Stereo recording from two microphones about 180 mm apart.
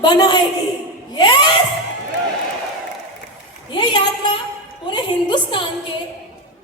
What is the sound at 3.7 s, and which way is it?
A woman's voice, 25° left (ahead or behind).